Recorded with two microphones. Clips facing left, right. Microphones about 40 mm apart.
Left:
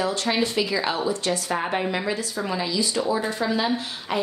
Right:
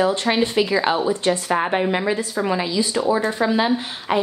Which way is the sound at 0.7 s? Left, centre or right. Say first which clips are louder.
Right 6 dB; right.